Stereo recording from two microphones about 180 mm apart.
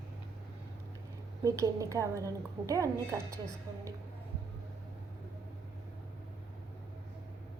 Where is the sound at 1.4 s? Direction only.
20° right (ahead or behind).